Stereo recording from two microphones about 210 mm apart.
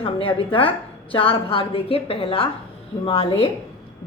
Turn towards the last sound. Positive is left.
turn(degrees=30)  # may be behind; listen again after turning